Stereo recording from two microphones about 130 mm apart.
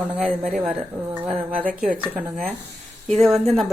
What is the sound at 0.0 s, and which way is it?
Speech, 10° right (ahead or behind).